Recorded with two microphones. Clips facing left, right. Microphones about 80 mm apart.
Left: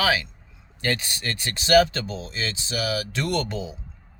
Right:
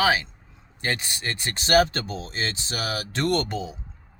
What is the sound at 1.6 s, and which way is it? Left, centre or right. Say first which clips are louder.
Speech: left 2 dB; right.